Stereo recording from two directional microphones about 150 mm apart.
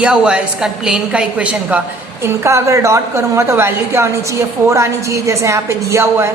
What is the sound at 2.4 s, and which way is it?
A woman's voice, 20° right (ahead or behind).